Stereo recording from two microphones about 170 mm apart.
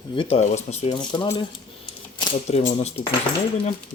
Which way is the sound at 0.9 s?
25° left (ahead or behind).